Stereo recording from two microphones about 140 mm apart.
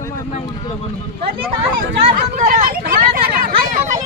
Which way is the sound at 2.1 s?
75° right (ahead or behind).